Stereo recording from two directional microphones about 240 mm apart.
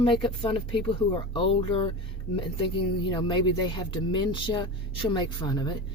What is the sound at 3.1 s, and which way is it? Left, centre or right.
Speech, centre.